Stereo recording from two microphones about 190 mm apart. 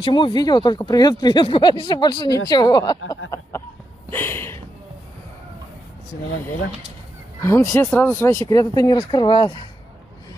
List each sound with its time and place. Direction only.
0.0 s speech: 25° left (ahead or behind)
4.1 s a sound: 10° left (ahead or behind)
7.3 s speech: 15° left (ahead or behind)